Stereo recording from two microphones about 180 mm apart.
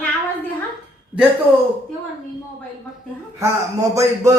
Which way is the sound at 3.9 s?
15° right (ahead or behind).